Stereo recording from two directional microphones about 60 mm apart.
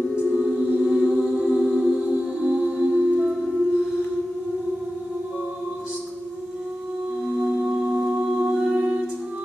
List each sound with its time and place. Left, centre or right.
0.1 s music: centre
7.3 s singing bowl: centre